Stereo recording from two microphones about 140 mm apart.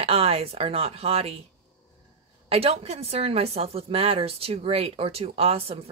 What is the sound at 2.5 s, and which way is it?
A woman's voice, 45° right (ahead or behind).